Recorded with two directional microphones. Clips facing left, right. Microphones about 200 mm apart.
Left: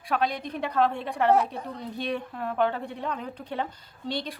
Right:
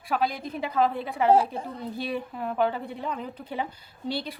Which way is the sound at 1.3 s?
30° right (ahead or behind).